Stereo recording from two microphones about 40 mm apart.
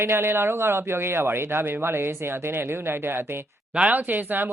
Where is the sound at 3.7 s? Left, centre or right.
Right.